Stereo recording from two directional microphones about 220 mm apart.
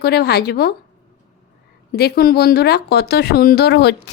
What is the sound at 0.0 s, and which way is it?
Speech, 45° left (ahead or behind).